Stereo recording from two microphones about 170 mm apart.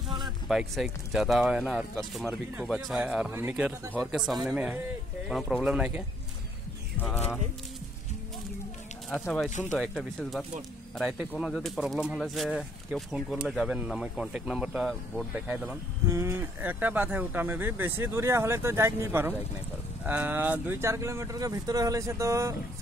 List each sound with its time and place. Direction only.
0.5 s speech: centre (ahead or behind)
4.1 s speech: centre (ahead or behind)
9.2 s speech: 5° left (ahead or behind)
9.5 s speech: 45° left (ahead or behind)
9.8 s speech: centre (ahead or behind); by 22.6 s 20° right (ahead or behind)